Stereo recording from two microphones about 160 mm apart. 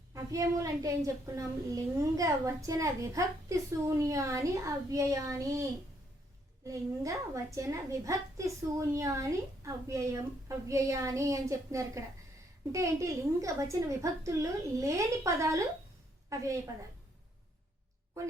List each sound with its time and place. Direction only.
0.1 s a woman's voice: 20° right (ahead or behind)
6.7 s a woman's voice: 20° right (ahead or behind)